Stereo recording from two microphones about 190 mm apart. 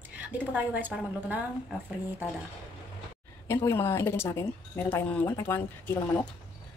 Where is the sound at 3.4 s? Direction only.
15° left (ahead or behind).